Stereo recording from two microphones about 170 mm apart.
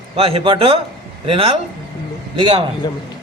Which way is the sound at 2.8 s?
25° left (ahead or behind).